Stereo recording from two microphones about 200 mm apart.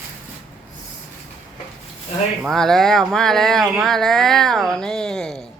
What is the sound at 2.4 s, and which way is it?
Speech, centre (ahead or behind).